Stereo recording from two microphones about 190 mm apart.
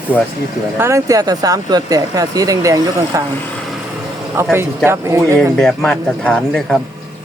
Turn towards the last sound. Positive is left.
turn(degrees=5)  # may be behind; listen again after turning